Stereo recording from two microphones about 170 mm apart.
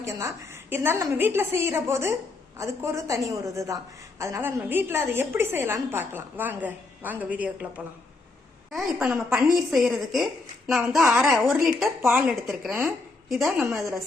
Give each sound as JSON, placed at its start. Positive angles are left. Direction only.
{"t": 0.0, "sound": "a woman's voice", "side_deg": -15}
{"t": 8.7, "sound": "a woman's voice", "side_deg": -5}